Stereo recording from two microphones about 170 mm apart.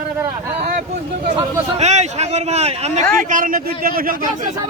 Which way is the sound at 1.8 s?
40° right (ahead or behind).